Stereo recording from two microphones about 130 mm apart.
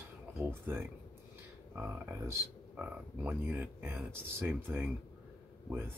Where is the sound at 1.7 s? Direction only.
15° right (ahead or behind).